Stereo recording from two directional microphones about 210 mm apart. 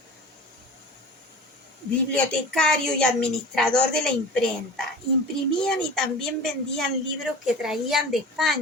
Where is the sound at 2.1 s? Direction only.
5° left (ahead or behind).